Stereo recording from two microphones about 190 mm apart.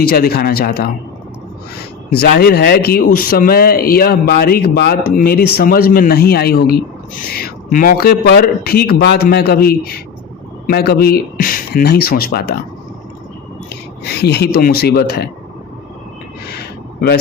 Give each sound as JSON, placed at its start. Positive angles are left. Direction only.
{"t": 0.0, "sound": "speech", "side_deg": 55}
{"t": 2.0, "sound": "speech", "side_deg": 55}
{"t": 14.2, "sound": "speech", "side_deg": 60}
{"t": 16.6, "sound": "a sound", "side_deg": 55}